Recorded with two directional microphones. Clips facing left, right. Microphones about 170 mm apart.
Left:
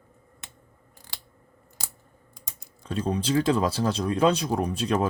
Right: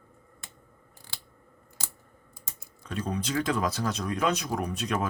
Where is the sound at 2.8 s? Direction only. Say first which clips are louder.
Left 5 dB; 30° left (ahead or behind).